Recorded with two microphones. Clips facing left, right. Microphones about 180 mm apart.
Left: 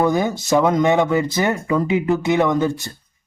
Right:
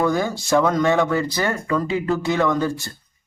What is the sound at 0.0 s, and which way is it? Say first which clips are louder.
Speech: left 2 dB; 20° left (ahead or behind).